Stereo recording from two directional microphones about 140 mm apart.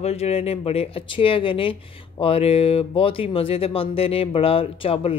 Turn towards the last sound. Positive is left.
turn(degrees=40)  # may be behind; listen again after turning